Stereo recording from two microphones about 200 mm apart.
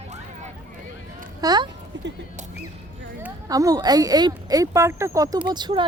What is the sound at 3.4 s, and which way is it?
Speech, 20° right (ahead or behind).